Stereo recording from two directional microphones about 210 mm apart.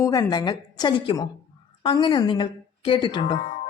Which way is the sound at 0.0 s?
15° left (ahead or behind).